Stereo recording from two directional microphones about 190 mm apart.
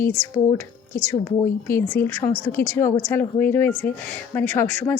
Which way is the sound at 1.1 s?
15° left (ahead or behind).